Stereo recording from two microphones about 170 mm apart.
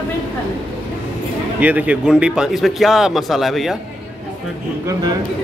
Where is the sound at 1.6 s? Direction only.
10° right (ahead or behind).